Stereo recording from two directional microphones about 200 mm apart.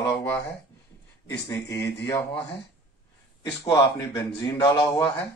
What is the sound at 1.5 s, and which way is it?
Speech, 20° left (ahead or behind).